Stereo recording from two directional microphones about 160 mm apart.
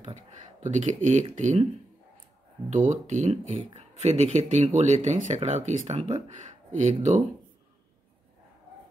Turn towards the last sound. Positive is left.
turn(degrees=-50)  # may be behind; listen again after turning